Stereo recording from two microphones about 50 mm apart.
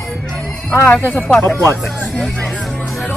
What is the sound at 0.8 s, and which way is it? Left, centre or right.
Speech, left.